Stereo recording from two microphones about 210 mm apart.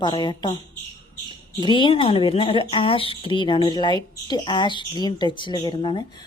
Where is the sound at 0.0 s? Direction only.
20° left (ahead or behind).